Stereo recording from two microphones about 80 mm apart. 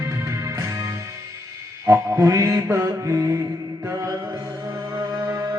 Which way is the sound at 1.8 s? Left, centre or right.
Right.